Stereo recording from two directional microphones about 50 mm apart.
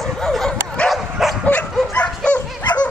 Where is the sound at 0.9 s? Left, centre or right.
Centre.